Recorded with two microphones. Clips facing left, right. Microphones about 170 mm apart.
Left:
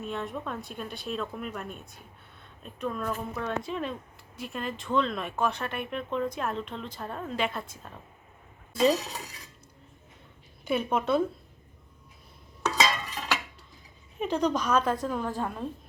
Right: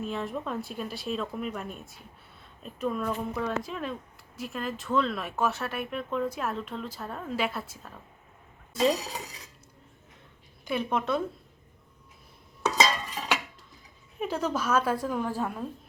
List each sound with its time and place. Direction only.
0.0 s speech: centre (ahead or behind)
10.7 s speech: 5° left (ahead or behind)
12.8 s a sound: centre (ahead or behind)
14.2 s speech: 5° right (ahead or behind)